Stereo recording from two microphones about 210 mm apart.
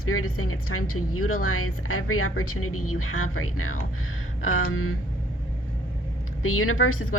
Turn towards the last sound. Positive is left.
turn(degrees=85)